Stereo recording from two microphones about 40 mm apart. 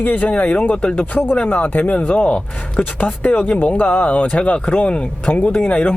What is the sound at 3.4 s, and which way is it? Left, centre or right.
Speech, left.